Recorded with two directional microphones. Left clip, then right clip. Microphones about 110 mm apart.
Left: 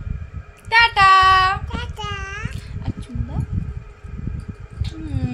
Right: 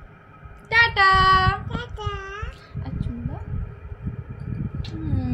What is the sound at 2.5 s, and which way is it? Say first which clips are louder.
Music: left 3 dB; 15° left (ahead or behind).